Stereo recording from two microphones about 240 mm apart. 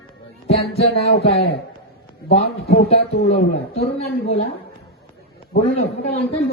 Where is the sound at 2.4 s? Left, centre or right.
Left.